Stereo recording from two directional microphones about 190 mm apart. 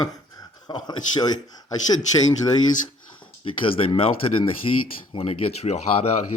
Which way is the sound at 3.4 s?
30° left (ahead or behind).